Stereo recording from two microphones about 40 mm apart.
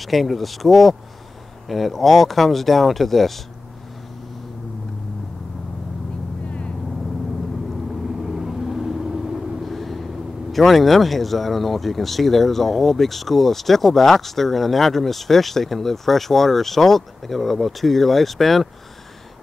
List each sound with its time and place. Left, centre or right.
0.0 s speech: centre
6.4 s vehicle: left
8.2 s vehicle: centre
9.7 s vehicle: centre
10.5 s speech: centre